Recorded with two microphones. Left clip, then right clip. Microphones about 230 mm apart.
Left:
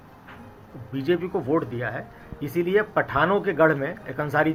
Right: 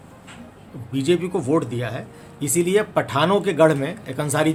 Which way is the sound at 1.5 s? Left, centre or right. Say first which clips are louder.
Right 3 dB; right.